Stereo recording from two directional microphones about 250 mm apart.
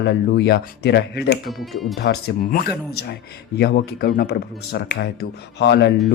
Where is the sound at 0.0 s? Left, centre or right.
Left.